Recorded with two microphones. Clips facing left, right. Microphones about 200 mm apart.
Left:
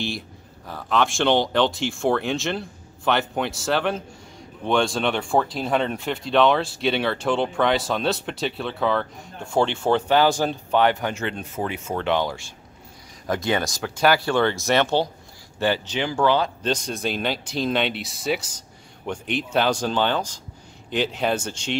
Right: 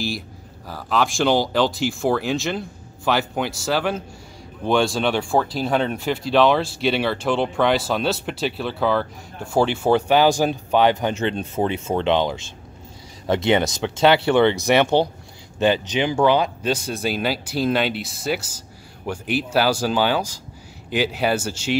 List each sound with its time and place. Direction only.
0.7 s speech: 5° right (ahead or behind)